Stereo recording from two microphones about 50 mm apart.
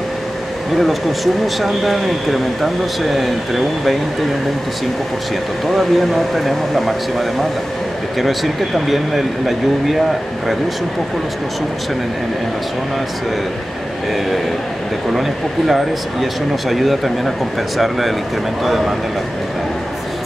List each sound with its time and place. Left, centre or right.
0.7 s speech: centre
5.7 s speech: centre
15.1 s speech: centre